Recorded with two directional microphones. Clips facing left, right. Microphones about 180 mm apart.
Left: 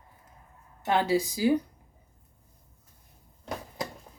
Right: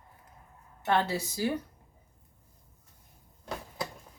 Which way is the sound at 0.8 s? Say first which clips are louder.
Left 3 dB; 10° left (ahead or behind).